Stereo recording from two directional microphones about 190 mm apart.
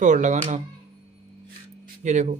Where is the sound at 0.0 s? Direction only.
40° right (ahead or behind).